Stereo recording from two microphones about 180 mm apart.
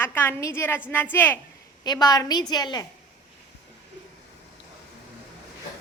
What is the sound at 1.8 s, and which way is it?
A woman's voice, 25° left (ahead or behind).